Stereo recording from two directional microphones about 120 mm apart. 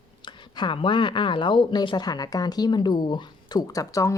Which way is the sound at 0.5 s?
45° left (ahead or behind).